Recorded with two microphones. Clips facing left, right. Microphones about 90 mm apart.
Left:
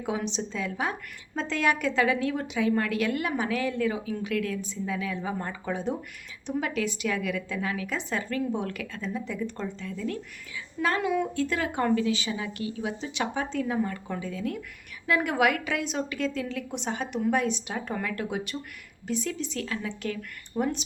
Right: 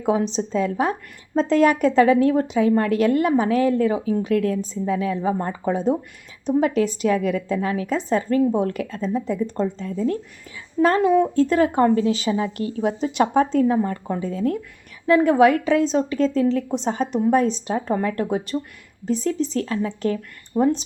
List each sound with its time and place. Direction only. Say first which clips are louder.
0.0 s a woman's voice: right 9 dB; 40° right (ahead or behind)